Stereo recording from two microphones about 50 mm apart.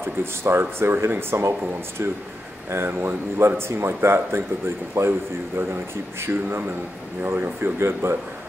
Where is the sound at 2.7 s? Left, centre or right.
Right.